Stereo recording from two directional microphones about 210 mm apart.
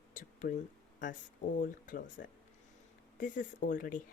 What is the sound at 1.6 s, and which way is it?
Speech, 40° left (ahead or behind).